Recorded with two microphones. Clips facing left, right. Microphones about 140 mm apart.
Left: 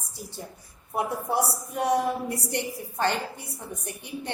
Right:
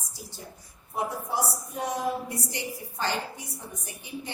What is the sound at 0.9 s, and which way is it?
A woman's voice, 65° left (ahead or behind).